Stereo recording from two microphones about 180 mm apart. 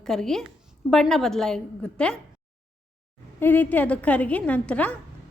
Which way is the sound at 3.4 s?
10° left (ahead or behind).